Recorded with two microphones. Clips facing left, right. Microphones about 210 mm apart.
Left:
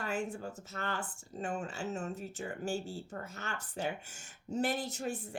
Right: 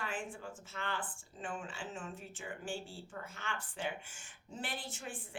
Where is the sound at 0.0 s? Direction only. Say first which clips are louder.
Left 6 dB; 40° left (ahead or behind).